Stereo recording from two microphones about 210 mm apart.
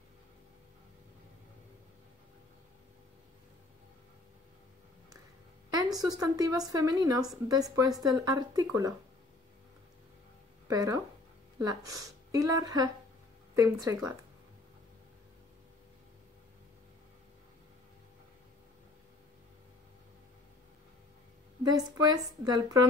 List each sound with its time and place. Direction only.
5.7 s speech: 15° right (ahead or behind)
10.7 s speech: 15° right (ahead or behind)
21.6 s speech: 20° right (ahead or behind)